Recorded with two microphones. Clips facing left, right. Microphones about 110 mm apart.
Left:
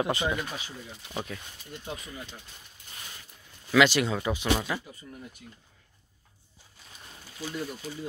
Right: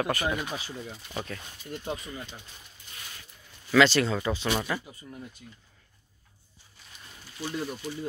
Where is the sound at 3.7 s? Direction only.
10° left (ahead or behind).